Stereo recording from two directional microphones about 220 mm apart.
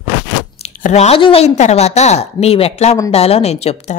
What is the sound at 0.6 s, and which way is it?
Speech, 30° left (ahead or behind).